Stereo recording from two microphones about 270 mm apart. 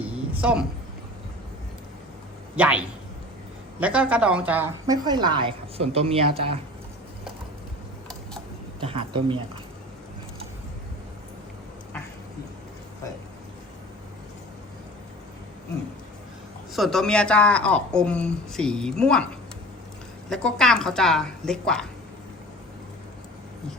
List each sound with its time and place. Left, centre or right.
0.0 s a sound: centre
2.6 s a woman's voice: centre; by 6.4 s right
8.9 s speech: centre
16.7 s speech: centre
20.3 s speech: centre